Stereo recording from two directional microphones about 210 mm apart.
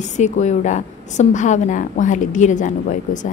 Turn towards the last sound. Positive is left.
turn(degrees=35)  # may be behind; listen again after turning